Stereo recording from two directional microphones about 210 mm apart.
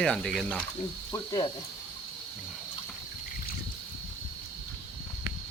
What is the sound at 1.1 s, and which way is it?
Speech, 15° left (ahead or behind).